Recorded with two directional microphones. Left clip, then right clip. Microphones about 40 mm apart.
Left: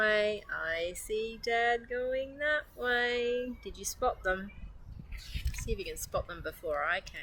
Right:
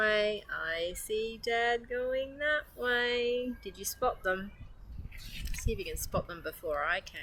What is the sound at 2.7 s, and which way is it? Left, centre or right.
Speech, right.